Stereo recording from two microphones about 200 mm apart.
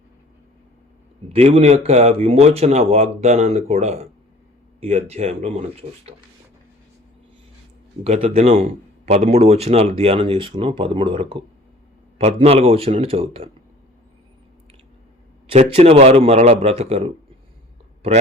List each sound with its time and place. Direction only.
1.3 s speech: 30° right (ahead or behind)
8.0 s a man's voice: 30° right (ahead or behind)
15.4 s speech: 30° right (ahead or behind)